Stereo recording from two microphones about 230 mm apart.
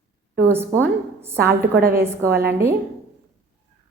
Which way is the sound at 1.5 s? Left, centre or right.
Right.